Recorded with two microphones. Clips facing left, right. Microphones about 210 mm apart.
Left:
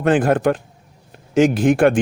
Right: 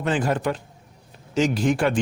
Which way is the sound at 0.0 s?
55° left (ahead or behind).